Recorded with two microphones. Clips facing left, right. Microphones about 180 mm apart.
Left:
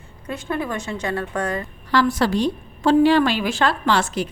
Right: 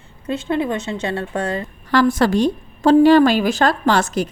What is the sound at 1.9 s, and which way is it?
A woman's voice, 50° right (ahead or behind).